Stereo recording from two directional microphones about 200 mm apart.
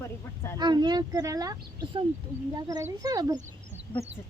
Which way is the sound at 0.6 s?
20° right (ahead or behind).